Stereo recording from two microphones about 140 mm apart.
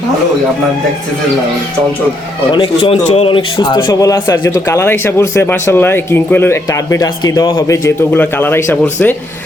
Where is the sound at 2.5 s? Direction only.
35° left (ahead or behind).